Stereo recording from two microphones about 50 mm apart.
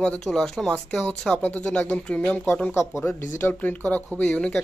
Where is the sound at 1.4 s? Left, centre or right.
Left.